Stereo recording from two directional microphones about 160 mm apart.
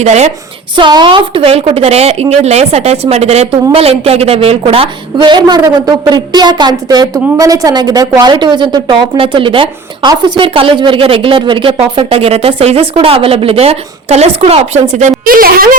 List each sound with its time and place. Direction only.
0.0 s a woman's voice: 45° right (ahead or behind)
0.8 s a woman's voice: 30° right (ahead or behind); by 15.1 s 45° right (ahead or behind)
15.2 s a woman's voice: 65° right (ahead or behind)